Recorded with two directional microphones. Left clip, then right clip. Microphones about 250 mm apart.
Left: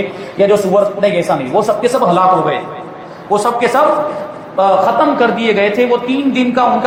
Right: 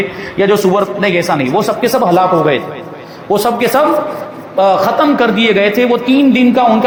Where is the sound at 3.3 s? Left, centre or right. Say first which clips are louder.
Right 1 dB; right.